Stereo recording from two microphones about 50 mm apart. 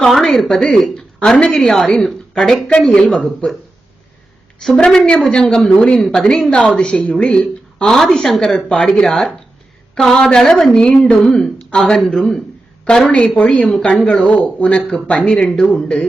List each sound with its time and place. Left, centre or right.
0.1 s speech: centre
0.6 s a woman's voice: centre
4.8 s a woman's voice: centre
13.1 s speech: left
15.2 s a woman's voice: centre